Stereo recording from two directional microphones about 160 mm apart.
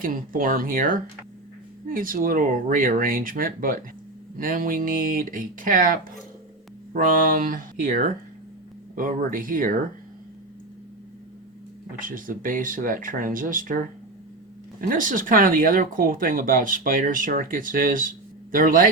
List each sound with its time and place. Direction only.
0.0 s speech: 60° right (ahead or behind)
11.9 s speech: 60° right (ahead or behind)